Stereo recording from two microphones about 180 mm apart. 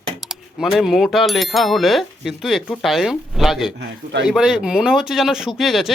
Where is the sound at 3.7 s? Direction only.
75° right (ahead or behind).